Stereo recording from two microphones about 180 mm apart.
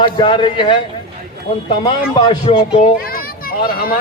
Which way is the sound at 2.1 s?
30° left (ahead or behind).